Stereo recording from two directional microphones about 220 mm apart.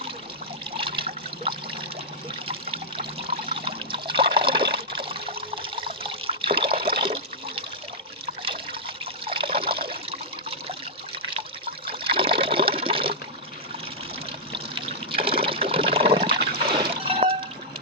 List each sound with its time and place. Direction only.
0.8 s water: 25° right (ahead or behind)
3.5 s water: 25° right (ahead or behind)
9.2 s trickle: 25° right (ahead or behind)
11.9 s water: 25° right (ahead or behind)
14.5 s water: 25° right (ahead or behind)